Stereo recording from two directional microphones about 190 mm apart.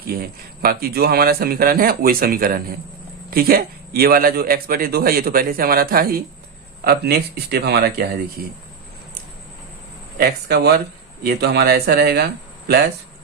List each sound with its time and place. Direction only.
0.1 s a man's voice: 50° right (ahead or behind)
10.2 s a man's voice: 55° right (ahead or behind)